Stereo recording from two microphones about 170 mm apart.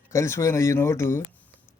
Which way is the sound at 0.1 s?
15° left (ahead or behind).